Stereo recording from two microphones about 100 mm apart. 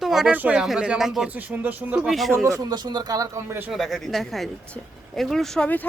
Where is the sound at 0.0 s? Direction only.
5° right (ahead or behind).